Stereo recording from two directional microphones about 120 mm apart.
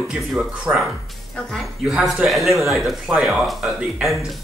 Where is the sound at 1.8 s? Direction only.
5° right (ahead or behind).